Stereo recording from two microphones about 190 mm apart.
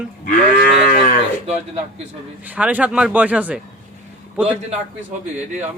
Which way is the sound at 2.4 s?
10° right (ahead or behind).